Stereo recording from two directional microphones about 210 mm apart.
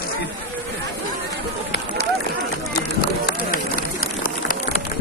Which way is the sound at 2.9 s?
45° left (ahead or behind).